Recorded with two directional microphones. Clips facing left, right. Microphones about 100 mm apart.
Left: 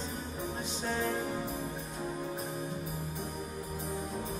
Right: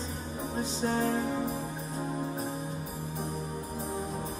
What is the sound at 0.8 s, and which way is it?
Music, 35° right (ahead or behind).